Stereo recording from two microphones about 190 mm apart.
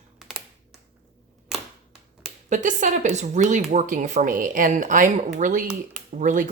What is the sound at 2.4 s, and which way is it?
A woman's voice, 40° right (ahead or behind).